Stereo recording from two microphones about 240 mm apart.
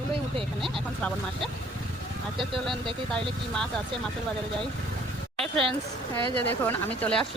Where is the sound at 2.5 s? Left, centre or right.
Centre.